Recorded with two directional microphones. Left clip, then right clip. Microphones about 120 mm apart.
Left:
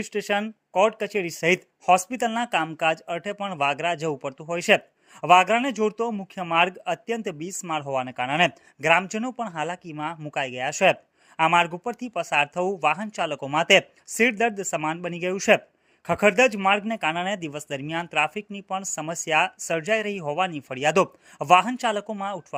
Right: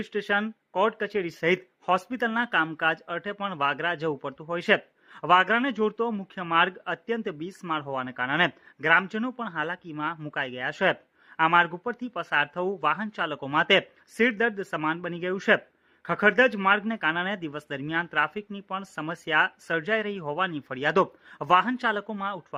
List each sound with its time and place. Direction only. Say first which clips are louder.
0.0 s speech: left 1 dB; 25° left (ahead or behind)